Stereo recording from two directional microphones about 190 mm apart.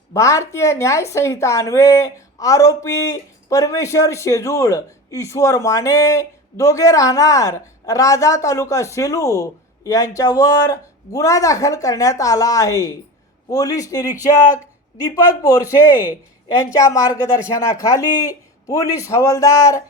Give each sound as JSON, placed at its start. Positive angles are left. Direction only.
{"t": 0.1, "sound": "a woman's voice", "side_deg": 15}
{"t": 15.1, "sound": "a woman's voice", "side_deg": 20}